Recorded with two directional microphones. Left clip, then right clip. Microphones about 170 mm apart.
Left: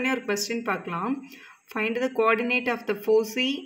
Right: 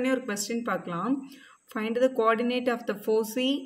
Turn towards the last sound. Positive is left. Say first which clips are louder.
# left 3 dB
turn(degrees=30)  # may be behind; listen again after turning